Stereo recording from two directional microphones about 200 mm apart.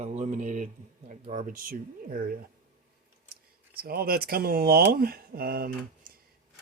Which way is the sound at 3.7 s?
50° right (ahead or behind).